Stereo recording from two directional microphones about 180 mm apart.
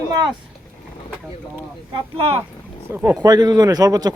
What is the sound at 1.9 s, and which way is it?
Speech, 30° right (ahead or behind).